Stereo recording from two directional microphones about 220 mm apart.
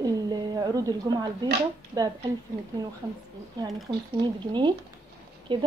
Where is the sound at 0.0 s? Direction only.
20° right (ahead or behind).